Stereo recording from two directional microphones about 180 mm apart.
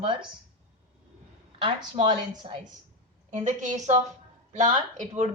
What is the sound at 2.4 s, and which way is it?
Speech, 30° right (ahead or behind).